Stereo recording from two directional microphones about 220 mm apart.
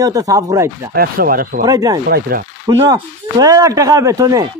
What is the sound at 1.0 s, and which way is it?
Speech, 40° right (ahead or behind).